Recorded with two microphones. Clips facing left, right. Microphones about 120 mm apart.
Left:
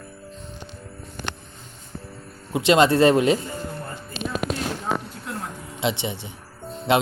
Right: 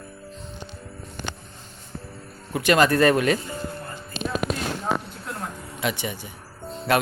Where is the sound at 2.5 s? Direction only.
25° left (ahead or behind).